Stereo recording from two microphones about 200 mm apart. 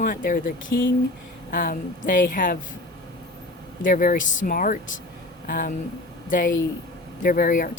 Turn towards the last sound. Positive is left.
turn(degrees=40)  # may be behind; listen again after turning